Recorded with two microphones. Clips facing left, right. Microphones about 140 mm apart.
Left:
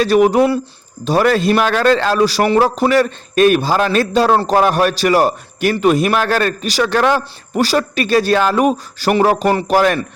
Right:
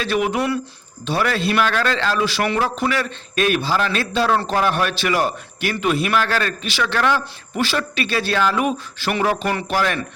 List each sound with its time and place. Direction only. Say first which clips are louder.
0.0 s a man's voice: left 9 dB; 40° left (ahead or behind)
1.0 s a man's voice: left 7 dB; 40° left (ahead or behind)